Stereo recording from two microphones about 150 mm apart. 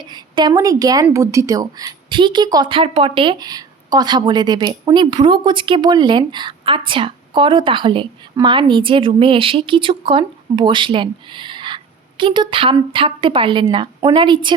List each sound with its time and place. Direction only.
0.1 s a woman's voice: 30° right (ahead or behind)